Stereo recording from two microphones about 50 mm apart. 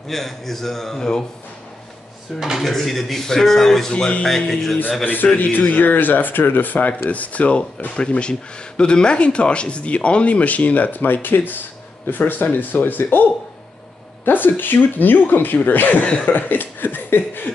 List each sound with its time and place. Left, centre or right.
0.1 s a man's voice: centre
2.6 s a man's voice: centre
5.0 s a man's voice: left
14.2 s a man's voice: left
16.3 s a sound: left